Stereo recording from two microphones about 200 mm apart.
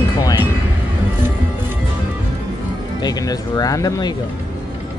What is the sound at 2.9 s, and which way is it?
Speech, 20° left (ahead or behind).